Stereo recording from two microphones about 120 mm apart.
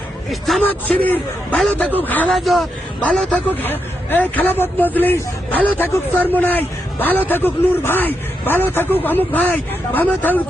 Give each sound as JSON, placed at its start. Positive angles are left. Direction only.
{"t": 0.3, "sound": "speech", "side_deg": 0}
{"t": 0.6, "sound": "a man's voice", "side_deg": 15}
{"t": 2.3, "sound": "a man's voice", "side_deg": 0}